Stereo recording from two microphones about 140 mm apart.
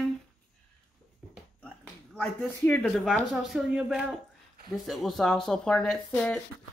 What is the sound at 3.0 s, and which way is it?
Speech, centre (ahead or behind).